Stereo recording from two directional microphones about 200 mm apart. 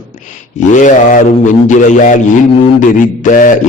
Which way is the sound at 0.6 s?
40° left (ahead or behind).